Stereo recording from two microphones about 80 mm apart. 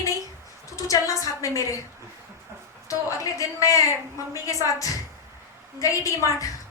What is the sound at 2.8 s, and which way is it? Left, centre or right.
A woman's voice, left.